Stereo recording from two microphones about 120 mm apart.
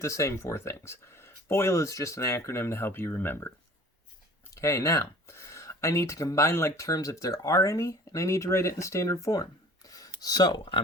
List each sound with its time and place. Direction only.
0.0 s speech: 25° left (ahead or behind)
4.5 s speech: 25° left (ahead or behind); by 10.8 s 40° left (ahead or behind)